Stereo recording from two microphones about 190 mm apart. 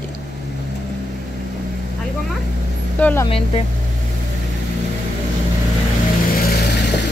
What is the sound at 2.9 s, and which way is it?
Speech, 10° left (ahead or behind).